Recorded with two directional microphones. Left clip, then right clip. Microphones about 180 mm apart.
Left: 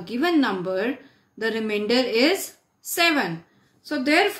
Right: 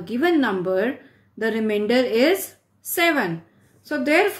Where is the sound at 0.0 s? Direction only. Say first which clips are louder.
Right 2 dB; 20° right (ahead or behind).